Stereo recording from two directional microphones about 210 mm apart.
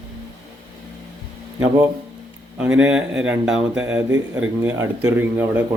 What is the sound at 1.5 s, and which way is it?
A man's voice, 10° right (ahead or behind).